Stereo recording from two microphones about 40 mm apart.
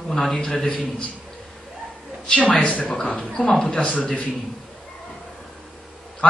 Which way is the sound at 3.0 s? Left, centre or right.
Left.